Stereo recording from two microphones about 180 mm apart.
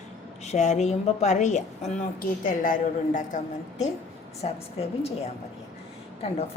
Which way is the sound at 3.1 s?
45° left (ahead or behind).